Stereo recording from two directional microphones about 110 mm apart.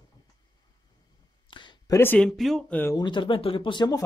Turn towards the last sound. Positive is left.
turn(degrees=40)  # may be behind; listen again after turning